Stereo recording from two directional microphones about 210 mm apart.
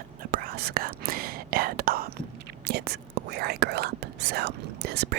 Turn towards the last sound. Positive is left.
turn(degrees=-50)  # may be behind; listen again after turning